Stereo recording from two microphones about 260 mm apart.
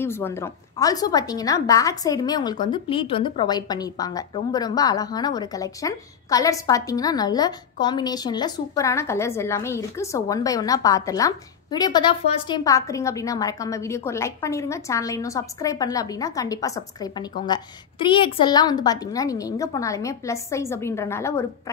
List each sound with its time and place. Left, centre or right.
0.0 s a woman's voice: centre